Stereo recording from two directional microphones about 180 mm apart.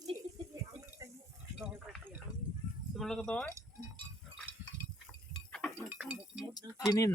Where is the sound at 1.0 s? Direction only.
15° right (ahead or behind).